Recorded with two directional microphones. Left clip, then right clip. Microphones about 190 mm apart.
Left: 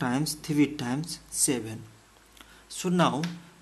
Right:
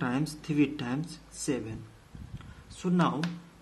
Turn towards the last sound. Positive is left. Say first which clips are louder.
# left 4 dB
turn(degrees=25)  # may be behind; listen again after turning